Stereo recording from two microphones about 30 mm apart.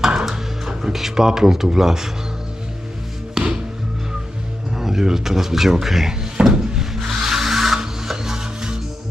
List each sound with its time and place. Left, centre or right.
0.1 s music: centre
0.9 s speech: centre
3.4 s music: right
4.8 s speech: centre
6.5 s music: centre